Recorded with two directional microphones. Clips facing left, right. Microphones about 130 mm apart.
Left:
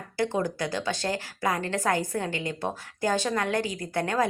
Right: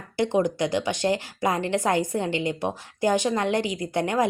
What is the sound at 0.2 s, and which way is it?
A woman's voice, 20° right (ahead or behind).